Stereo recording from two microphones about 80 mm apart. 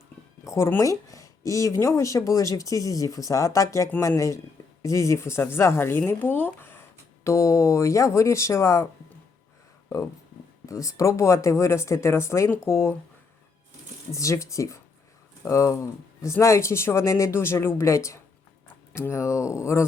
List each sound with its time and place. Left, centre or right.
0.4 s speech: left
7.3 s speech: left
10.7 s speech: left
14.1 s speech: left